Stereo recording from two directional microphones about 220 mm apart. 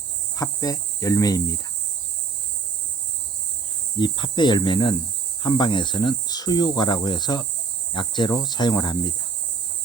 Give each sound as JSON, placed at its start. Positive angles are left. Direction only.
{"t": 0.3, "sound": "cricket", "side_deg": 15}
{"t": 3.9, "sound": "speech", "side_deg": 20}